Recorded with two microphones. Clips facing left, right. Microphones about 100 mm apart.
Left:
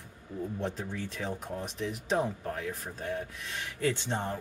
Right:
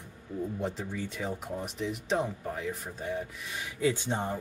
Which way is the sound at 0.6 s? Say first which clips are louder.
Right 1 dB; 5° right (ahead or behind).